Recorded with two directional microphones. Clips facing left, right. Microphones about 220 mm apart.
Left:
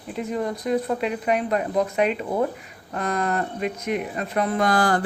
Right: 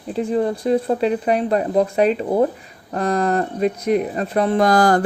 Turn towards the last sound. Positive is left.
turn(degrees=-40)  # may be behind; listen again after turning